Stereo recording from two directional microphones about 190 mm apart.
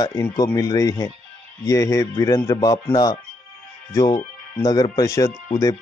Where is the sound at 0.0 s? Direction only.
20° left (ahead or behind).